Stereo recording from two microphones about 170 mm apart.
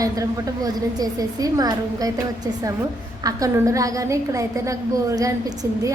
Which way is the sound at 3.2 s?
20° right (ahead or behind).